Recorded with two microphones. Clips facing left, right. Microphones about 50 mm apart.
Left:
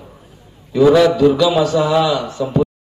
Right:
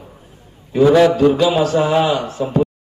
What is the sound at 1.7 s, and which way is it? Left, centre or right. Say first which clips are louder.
Speech: even; right.